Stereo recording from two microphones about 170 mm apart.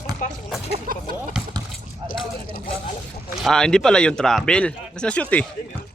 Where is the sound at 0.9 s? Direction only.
60° right (ahead or behind).